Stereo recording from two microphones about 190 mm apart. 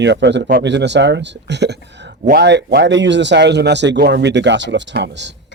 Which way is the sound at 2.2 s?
55° right (ahead or behind).